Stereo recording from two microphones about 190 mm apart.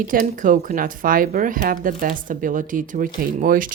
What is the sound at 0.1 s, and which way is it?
Speech, 45° right (ahead or behind).